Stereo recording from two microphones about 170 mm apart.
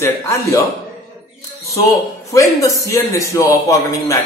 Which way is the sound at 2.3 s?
20° left (ahead or behind).